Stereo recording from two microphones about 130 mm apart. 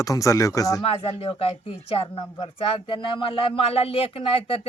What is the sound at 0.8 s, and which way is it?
Speech, 50° left (ahead or behind).